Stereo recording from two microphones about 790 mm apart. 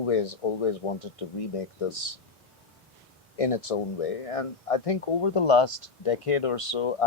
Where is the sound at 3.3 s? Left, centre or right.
Left.